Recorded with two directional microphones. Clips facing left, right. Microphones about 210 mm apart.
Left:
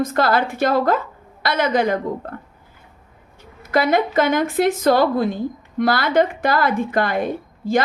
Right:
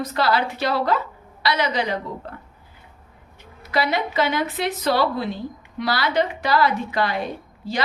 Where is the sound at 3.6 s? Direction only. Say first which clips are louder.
Left 5 dB; 50° left (ahead or behind).